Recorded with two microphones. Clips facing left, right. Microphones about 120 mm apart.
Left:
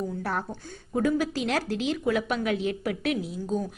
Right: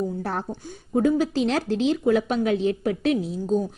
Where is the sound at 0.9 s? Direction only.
25° right (ahead or behind).